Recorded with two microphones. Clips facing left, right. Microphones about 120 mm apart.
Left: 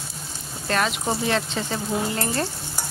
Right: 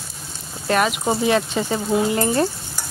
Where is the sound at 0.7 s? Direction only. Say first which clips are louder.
Right 5 dB; 10° right (ahead or behind).